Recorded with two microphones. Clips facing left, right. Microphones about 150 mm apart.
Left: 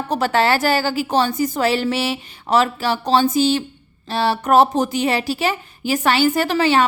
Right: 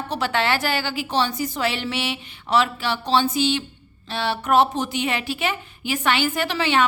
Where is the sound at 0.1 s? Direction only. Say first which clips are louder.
Left 5 dB; 45° left (ahead or behind).